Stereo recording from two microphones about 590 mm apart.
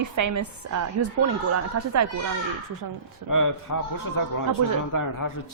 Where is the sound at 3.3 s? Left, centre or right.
Left.